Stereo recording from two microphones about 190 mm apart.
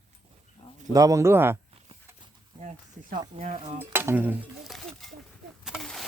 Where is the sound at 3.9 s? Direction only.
10° right (ahead or behind).